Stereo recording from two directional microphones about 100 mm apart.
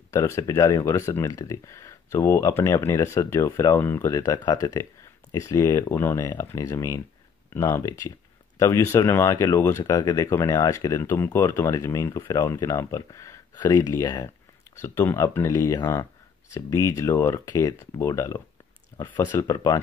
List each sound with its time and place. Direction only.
0.1 s speech: 30° left (ahead or behind)
14.8 s speech: 25° left (ahead or behind)